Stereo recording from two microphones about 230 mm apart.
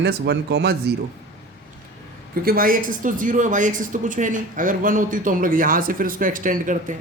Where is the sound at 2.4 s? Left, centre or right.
Right.